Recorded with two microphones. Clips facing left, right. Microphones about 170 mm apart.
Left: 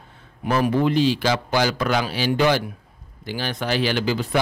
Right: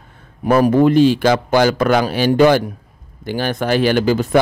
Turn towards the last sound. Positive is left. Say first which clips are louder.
# right 7 dB
turn(degrees=-50)  # may be behind; listen again after turning